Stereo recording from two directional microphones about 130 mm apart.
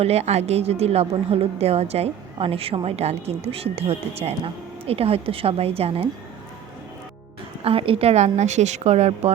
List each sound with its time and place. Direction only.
0.0 s a woman's voice: 55° right (ahead or behind)
7.6 s a woman's voice: 45° right (ahead or behind)